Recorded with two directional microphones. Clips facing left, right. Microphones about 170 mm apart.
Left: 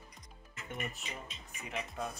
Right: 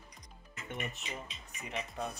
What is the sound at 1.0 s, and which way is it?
Speech, centre (ahead or behind).